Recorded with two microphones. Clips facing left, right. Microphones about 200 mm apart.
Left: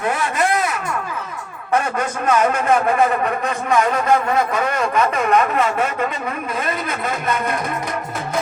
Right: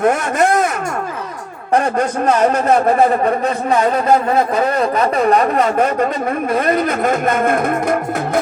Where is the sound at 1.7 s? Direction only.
35° right (ahead or behind).